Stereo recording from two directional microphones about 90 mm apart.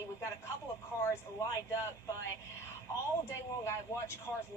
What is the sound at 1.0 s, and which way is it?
Speech, 35° left (ahead or behind).